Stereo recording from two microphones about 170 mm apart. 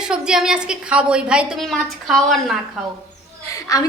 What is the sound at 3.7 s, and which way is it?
Speech, 20° left (ahead or behind).